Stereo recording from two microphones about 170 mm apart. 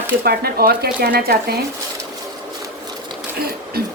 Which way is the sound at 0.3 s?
65° right (ahead or behind).